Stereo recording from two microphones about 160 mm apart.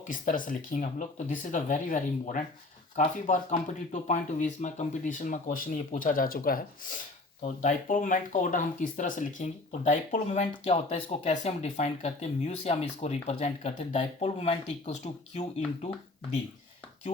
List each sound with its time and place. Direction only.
0.0 s speech: 55° left (ahead or behind)
7.4 s speech: 55° left (ahead or behind)
10.7 s speech: 35° left (ahead or behind)